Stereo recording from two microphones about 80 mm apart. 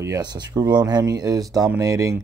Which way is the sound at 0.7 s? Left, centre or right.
Right.